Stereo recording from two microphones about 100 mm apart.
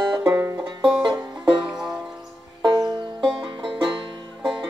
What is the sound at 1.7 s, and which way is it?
Music, 5° right (ahead or behind).